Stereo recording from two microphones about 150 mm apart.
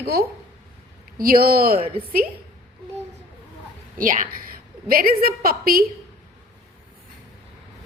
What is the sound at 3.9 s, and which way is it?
Speech, 65° right (ahead or behind).